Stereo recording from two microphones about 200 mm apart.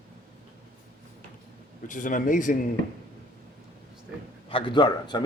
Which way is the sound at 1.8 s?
40° left (ahead or behind).